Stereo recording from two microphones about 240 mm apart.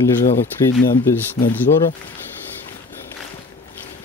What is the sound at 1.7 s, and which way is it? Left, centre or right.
Speech, left.